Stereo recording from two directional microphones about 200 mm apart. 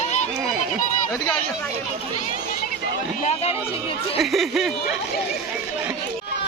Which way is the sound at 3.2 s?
30° left (ahead or behind).